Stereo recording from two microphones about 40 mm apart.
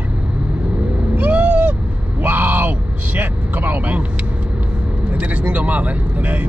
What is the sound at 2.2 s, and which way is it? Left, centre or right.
Speech, right.